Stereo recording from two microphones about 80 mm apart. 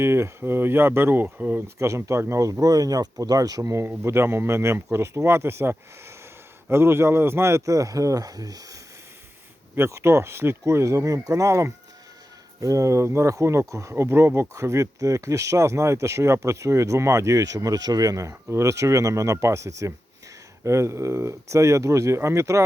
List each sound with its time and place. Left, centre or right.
0.0 s speech: right
1.6 s speech: right
3.8 s speech: right
9.7 s speech: right